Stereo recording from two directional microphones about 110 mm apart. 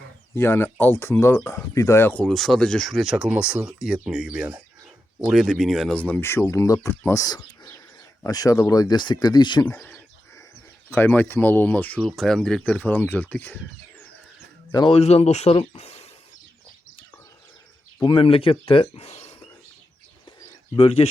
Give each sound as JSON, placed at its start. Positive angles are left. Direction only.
{"t": 0.3, "sound": "speech", "side_deg": 20}
{"t": 2.3, "sound": "speech", "side_deg": 5}
{"t": 5.9, "sound": "speech", "side_deg": 15}
{"t": 9.6, "sound": "speech", "side_deg": 10}
{"t": 12.0, "sound": "speech", "side_deg": 5}
{"t": 14.8, "sound": "speech", "side_deg": 70}
{"t": 18.0, "sound": "speech", "side_deg": 50}
{"t": 20.7, "sound": "speech", "side_deg": 60}